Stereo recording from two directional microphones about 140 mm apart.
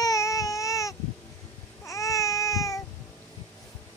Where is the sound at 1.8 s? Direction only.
25° left (ahead or behind).